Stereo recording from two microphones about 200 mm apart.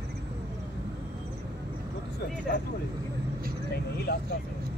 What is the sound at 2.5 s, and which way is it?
Speech, 60° left (ahead or behind).